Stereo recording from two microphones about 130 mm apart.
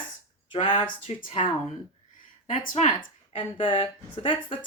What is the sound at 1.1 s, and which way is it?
Speech, 55° left (ahead or behind).